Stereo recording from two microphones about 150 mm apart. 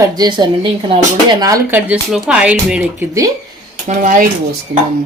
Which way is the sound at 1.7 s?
10° right (ahead or behind).